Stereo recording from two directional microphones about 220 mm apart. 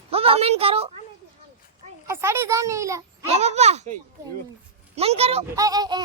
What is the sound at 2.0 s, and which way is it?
Speech, 10° right (ahead or behind).